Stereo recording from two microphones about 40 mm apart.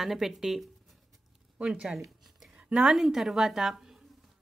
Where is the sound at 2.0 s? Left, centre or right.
Centre.